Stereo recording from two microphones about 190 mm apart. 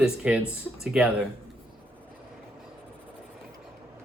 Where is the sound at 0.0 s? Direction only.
5° right (ahead or behind).